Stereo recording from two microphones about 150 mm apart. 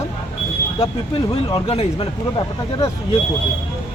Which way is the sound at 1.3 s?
40° left (ahead or behind).